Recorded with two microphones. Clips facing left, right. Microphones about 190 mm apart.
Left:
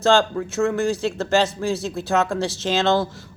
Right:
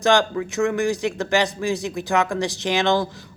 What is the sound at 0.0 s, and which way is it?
Speech, 15° right (ahead or behind).